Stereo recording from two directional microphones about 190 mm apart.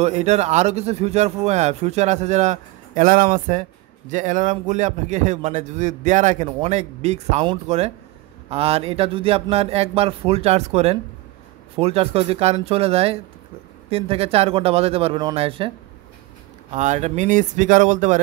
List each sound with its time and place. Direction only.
0.0 s a man's voice: 35° right (ahead or behind)
16.7 s a man's voice: 40° right (ahead or behind)